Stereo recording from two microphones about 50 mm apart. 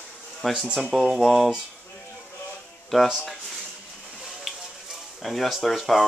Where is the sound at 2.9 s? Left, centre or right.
Centre.